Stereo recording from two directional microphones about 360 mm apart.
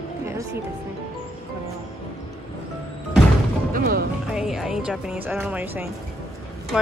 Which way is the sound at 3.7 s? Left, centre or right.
Right.